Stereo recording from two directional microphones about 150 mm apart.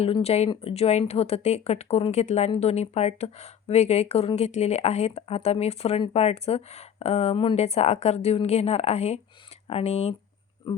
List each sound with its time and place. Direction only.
0.0 s speech: 45° left (ahead or behind)
10.7 s speech: 30° left (ahead or behind)